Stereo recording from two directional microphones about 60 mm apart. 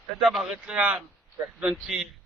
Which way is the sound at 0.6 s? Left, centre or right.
Centre.